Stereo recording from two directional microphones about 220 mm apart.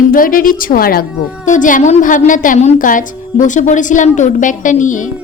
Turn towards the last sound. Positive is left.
turn(degrees=35)  # may be behind; listen again after turning